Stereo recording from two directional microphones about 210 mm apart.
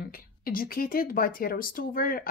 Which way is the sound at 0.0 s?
45° left (ahead or behind).